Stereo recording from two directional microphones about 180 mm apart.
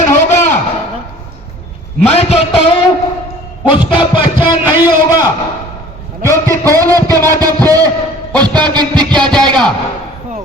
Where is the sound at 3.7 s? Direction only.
30° left (ahead or behind).